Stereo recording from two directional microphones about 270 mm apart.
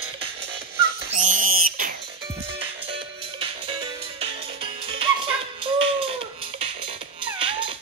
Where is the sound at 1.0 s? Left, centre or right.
Right.